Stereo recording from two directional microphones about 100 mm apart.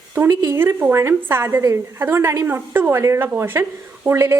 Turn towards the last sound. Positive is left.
turn(degrees=-25)  # may be behind; listen again after turning